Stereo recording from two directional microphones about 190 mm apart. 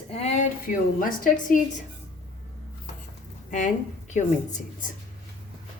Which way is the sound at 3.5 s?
40° left (ahead or behind).